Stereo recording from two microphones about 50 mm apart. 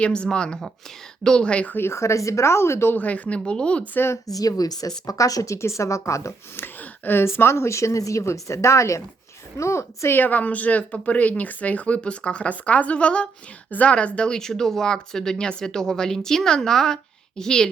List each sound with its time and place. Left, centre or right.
0.0 s speech: left
1.9 s a woman's voice: left
2.9 s speech: left
5.1 s speech: left
6.6 s a sound: left
7.2 s a woman's voice: left
9.6 s a woman's voice: left
10.1 s a woman's voice: left
13.9 s speech: left
14.3 s speech: centre